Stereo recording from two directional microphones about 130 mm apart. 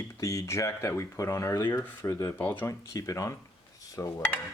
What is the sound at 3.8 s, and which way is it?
Dishes, 25° left (ahead or behind).